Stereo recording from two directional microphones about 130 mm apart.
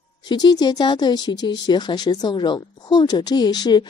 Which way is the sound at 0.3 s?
30° left (ahead or behind).